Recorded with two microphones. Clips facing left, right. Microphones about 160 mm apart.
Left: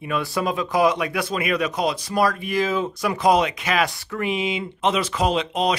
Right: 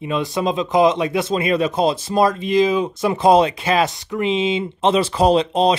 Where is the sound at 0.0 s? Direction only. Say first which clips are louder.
Right 3 dB; 20° right (ahead or behind).